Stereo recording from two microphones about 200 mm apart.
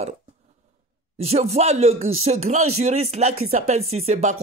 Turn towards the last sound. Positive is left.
turn(degrees=-35)  # may be behind; listen again after turning